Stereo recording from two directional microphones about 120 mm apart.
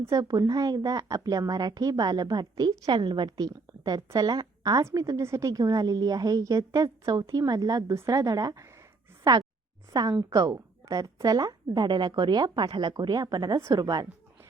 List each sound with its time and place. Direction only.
0.1 s speech: 30° right (ahead or behind)